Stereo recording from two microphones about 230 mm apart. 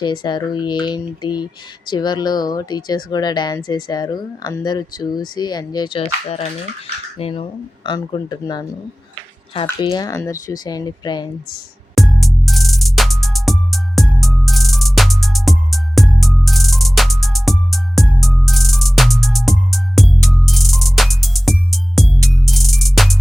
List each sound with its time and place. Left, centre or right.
0.0 s speech: centre
9.6 s speech: centre
11.9 s music: centre